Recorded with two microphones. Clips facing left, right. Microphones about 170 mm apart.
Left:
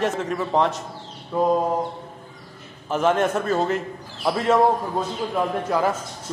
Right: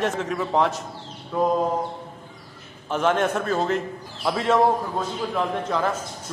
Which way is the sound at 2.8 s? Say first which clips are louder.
Left 1 dB; centre (ahead or behind).